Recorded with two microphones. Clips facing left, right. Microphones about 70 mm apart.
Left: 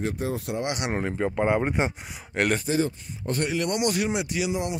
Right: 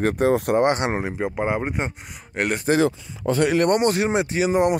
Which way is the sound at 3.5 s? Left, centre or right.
Right.